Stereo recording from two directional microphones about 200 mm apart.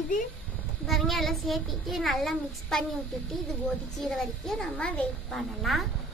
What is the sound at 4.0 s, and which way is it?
A child's voice, centre (ahead or behind).